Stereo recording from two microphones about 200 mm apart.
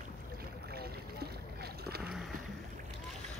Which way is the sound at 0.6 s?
50° right (ahead or behind).